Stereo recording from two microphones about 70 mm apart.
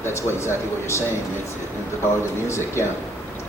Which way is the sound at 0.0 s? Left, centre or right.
Left.